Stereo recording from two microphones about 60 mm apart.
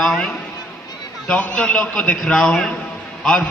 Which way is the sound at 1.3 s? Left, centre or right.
Left.